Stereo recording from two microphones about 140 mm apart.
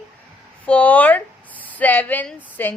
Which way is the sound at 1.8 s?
10° left (ahead or behind).